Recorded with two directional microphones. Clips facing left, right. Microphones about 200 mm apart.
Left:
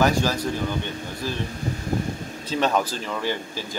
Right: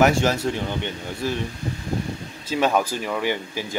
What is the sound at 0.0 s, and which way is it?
Speech, 20° right (ahead or behind).